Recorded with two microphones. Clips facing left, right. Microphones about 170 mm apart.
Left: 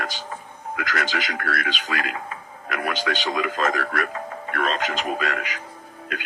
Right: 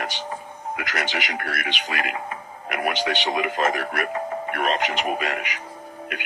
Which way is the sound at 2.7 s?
20° right (ahead or behind).